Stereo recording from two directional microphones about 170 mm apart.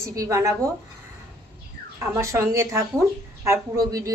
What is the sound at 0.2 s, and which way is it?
Speech, 20° right (ahead or behind).